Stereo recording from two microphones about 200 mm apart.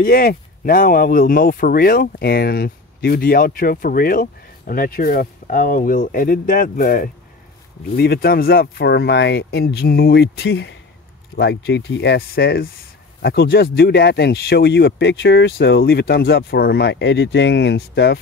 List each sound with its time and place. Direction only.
0.0 s speech: 45° left (ahead or behind)